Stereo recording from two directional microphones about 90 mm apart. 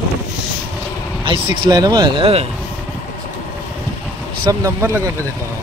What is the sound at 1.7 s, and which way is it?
Speech, 45° right (ahead or behind).